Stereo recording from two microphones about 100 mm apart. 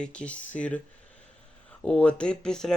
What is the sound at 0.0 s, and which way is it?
Speech, 10° left (ahead or behind).